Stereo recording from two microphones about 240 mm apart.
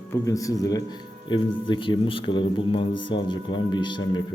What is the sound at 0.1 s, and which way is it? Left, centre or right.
A man's voice, centre.